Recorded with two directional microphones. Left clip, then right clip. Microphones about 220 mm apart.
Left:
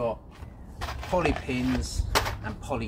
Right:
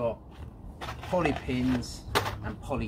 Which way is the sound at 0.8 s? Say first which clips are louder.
Left 2 dB; 5° left (ahead or behind).